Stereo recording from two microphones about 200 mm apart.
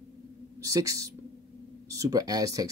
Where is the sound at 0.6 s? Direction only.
15° right (ahead or behind).